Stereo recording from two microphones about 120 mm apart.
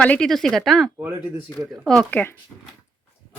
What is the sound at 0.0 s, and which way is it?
Speech, 10° left (ahead or behind).